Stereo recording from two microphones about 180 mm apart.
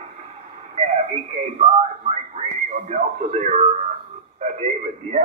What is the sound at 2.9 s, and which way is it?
Radio, 40° right (ahead or behind).